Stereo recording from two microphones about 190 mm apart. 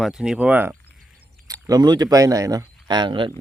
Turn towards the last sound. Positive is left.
turn(degrees=-25)  # may be behind; listen again after turning